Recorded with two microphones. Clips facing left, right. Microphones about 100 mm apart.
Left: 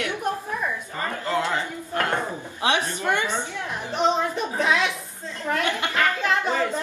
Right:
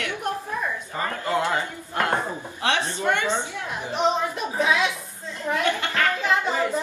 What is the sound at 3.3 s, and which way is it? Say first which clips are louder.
Speech: right 2 dB; 15° right (ahead or behind).